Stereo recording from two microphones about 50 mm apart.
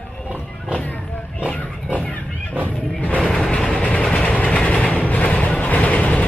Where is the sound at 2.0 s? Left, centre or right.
Left.